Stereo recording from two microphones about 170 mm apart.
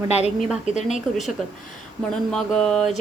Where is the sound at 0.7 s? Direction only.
45° left (ahead or behind).